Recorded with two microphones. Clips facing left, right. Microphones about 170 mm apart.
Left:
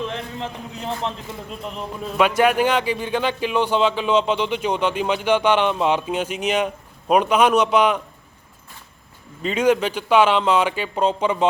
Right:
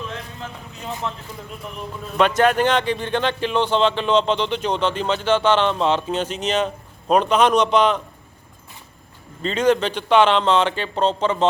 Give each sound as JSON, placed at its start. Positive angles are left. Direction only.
{"t": 1.0, "sound": "speech", "side_deg": 25}
{"t": 2.1, "sound": "speech", "side_deg": 10}
{"t": 9.4, "sound": "speech", "side_deg": 10}